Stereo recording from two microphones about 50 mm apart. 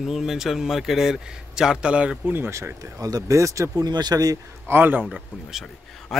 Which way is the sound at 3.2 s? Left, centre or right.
Right.